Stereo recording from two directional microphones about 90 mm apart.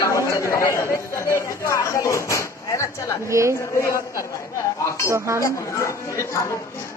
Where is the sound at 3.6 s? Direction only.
35° left (ahead or behind).